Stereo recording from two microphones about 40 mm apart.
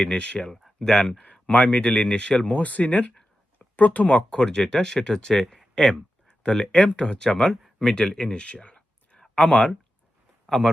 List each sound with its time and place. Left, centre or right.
0.0 s speech: left
2.6 s speech: left; by 5.5 s centre
5.5 s a sound: centre
5.8 s speech: left